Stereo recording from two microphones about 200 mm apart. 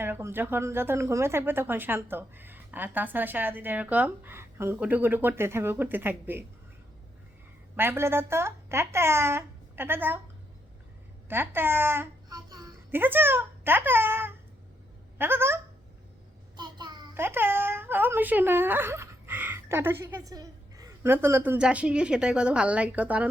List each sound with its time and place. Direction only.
0.0 s speech: 10° right (ahead or behind)
7.8 s speech: 10° right (ahead or behind)
11.3 s speech: 10° right (ahead or behind)
16.6 s child singing: 20° right (ahead or behind)
17.2 s speech: 10° right (ahead or behind)